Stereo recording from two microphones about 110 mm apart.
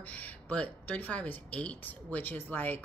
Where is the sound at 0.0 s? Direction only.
15° left (ahead or behind).